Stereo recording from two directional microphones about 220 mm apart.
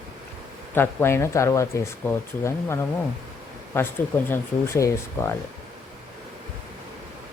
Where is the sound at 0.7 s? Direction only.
10° left (ahead or behind).